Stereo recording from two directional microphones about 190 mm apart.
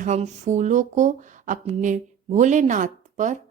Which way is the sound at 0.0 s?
35° right (ahead or behind).